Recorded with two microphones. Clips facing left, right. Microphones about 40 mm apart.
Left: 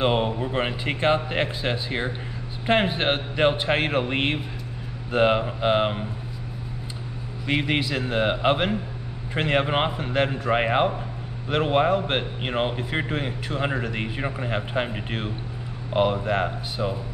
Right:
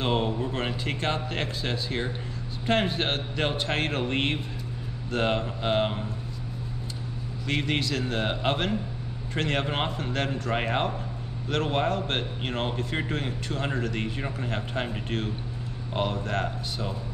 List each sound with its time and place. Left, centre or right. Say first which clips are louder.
0.0 s speech: left 4 dB; left
7.4 s a man's voice: left 4 dB; centre